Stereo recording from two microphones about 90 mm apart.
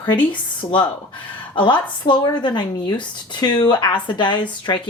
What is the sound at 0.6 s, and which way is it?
Speech, 60° left (ahead or behind).